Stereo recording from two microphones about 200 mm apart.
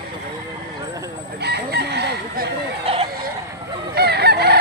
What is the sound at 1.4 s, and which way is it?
Chicken, 55° right (ahead or behind).